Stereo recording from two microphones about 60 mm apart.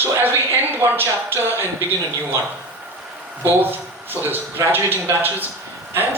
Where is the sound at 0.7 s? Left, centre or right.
Right.